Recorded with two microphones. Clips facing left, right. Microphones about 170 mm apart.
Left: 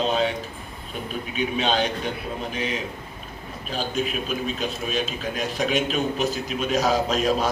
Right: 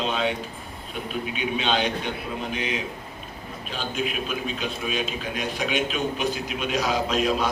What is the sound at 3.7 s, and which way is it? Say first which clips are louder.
A man's voice: left 3 dB; 40° left (ahead or behind).